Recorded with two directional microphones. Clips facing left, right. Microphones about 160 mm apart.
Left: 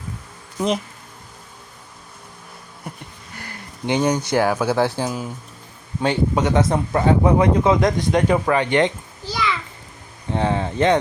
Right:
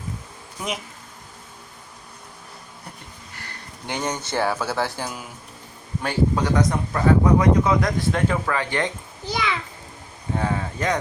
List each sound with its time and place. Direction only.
3.8 s speech: 15° left (ahead or behind)
9.2 s a child's voice: 20° right (ahead or behind)
10.3 s speech: 25° left (ahead or behind)